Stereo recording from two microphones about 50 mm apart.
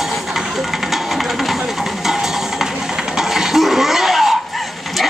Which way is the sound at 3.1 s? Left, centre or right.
Centre.